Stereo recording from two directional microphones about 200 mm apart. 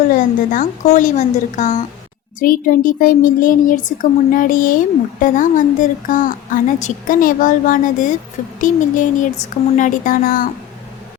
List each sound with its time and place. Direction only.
0.1 s speech: 40° left (ahead or behind)